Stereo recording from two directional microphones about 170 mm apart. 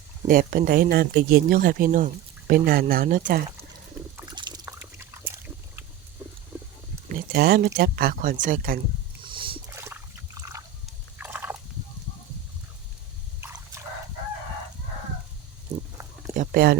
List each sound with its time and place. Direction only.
0.3 s speech: 55° right (ahead or behind)
4.3 s a sound: 25° right (ahead or behind)
4.6 s a sound: 15° right (ahead or behind)
7.1 s speech: 70° right (ahead or behind)
9.2 s rowboat: 30° right (ahead or behind)
9.6 s trickle: 15° right (ahead or behind)
11.2 s turkey: 10° right (ahead or behind)
13.4 s drip: 15° right (ahead or behind)
16.3 s speech: 50° right (ahead or behind)